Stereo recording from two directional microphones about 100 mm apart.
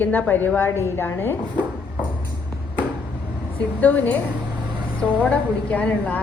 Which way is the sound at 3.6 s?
15° left (ahead or behind).